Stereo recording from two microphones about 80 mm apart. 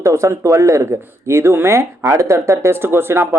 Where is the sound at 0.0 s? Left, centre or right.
Right.